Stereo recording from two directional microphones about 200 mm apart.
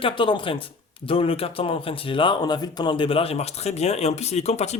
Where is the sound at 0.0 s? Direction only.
25° left (ahead or behind).